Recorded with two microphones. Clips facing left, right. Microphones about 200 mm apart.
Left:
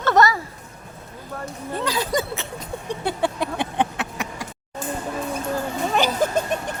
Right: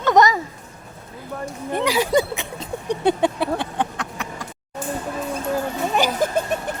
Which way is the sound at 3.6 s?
20° left (ahead or behind).